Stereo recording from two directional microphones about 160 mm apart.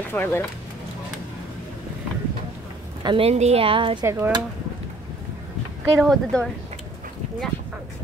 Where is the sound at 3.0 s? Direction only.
35° right (ahead or behind).